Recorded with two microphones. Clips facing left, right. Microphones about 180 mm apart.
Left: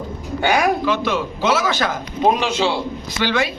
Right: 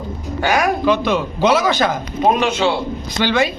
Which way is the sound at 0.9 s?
15° right (ahead or behind).